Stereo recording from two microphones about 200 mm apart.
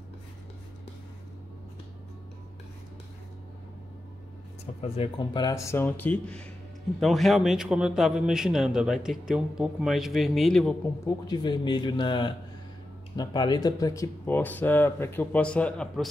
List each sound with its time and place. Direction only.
4.8 s a man's voice: 30° left (ahead or behind); by 10.8 s centre (ahead or behind)
11.1 s a man's voice: 20° left (ahead or behind); by 16.1 s 5° left (ahead or behind)